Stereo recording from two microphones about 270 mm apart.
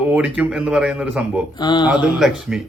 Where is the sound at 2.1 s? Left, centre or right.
Centre.